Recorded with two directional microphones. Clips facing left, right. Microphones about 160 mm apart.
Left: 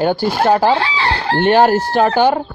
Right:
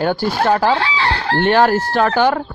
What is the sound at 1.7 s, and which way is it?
Chicken, 15° left (ahead or behind).